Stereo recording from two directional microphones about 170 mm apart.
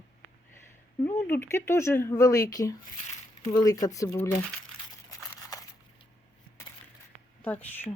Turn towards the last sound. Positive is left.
turn(degrees=10)  # may be behind; listen again after turning